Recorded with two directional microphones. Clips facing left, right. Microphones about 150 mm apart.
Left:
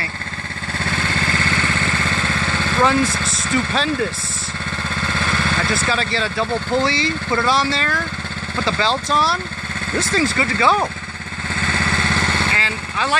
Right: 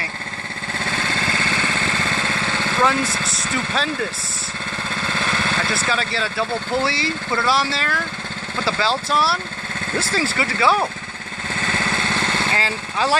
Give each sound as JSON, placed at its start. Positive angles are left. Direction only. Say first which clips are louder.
{"t": 2.8, "sound": "speech", "louder": "left 3 dB", "side_deg": 0}
{"t": 5.7, "sound": "speech", "louder": "left 2 dB", "side_deg": 0}
{"t": 12.5, "sound": "speech", "louder": "right 1 dB", "side_deg": -35}